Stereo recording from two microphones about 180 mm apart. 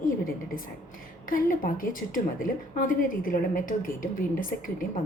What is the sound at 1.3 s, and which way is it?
Speech, 50° left (ahead or behind).